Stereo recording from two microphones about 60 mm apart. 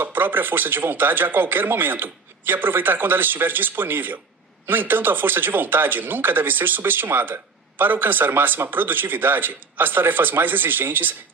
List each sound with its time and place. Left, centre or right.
0.0 s speech: right